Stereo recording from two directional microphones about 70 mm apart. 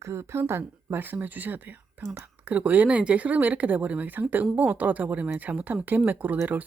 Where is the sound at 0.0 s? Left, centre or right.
Right.